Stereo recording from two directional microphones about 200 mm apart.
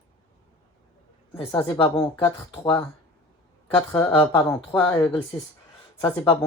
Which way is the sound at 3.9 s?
15° left (ahead or behind).